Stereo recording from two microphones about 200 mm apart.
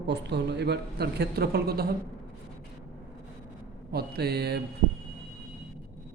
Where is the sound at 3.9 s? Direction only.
50° right (ahead or behind).